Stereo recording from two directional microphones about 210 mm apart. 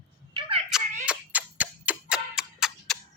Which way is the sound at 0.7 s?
Centre (ahead or behind).